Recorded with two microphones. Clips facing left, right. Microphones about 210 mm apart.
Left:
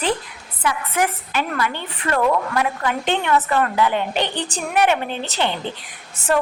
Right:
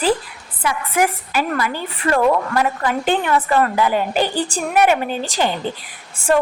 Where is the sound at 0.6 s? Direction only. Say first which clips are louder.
Right 2 dB; 10° right (ahead or behind).